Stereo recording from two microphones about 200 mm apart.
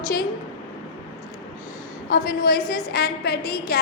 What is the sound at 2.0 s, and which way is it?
A woman's voice, 45° left (ahead or behind).